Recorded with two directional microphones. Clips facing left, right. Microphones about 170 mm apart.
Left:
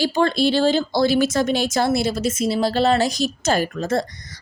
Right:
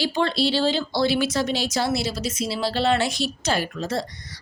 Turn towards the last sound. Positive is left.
turn(degrees=50)  # may be behind; listen again after turning